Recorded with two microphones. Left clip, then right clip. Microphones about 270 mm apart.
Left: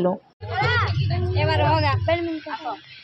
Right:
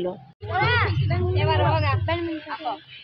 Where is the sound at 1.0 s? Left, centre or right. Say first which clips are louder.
Right 1 dB; left.